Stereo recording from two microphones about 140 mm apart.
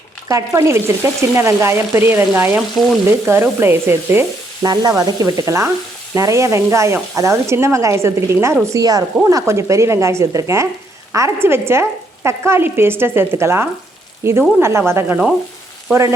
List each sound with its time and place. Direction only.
0.3 s speech: 20° right (ahead or behind)
2.6 s frying: centre (ahead or behind)
3.2 s speech: 15° right (ahead or behind)
4.6 s speech: 25° right (ahead or behind)